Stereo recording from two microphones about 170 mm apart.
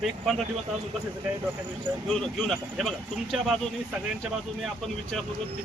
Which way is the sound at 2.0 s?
5° left (ahead or behind).